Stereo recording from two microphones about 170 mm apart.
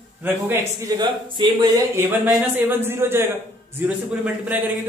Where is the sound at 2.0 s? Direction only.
10° right (ahead or behind).